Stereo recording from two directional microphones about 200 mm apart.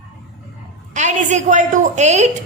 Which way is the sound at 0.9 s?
35° right (ahead or behind).